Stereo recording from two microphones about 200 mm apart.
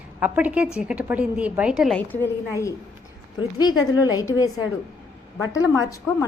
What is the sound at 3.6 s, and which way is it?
A woman's voice, 20° left (ahead or behind).